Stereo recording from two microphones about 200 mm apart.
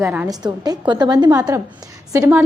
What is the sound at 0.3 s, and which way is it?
A woman's voice, 20° right (ahead or behind).